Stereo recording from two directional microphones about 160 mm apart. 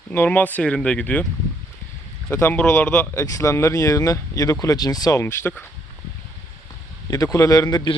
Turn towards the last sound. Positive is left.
turn(degrees=25)  # may be behind; listen again after turning